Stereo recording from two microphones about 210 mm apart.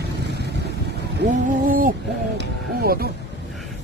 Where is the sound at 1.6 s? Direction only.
40° right (ahead or behind).